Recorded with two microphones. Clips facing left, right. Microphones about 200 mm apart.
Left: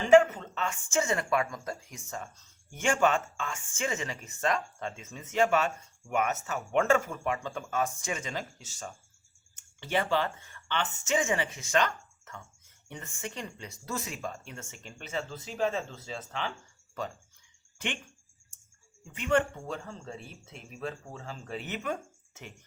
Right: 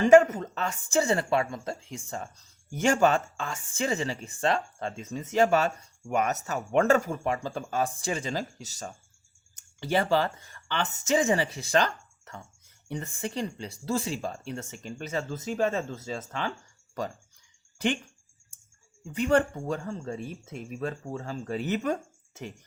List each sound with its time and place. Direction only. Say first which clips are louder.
0.1 s speech: right 1 dB; 40° right (ahead or behind)
17.7 s speech: right 9 dB; 35° right (ahead or behind)
19.1 s speech: right 4 dB; 35° right (ahead or behind)